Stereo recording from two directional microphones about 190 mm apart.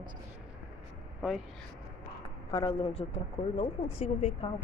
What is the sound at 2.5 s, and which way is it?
Speech, 25° left (ahead or behind).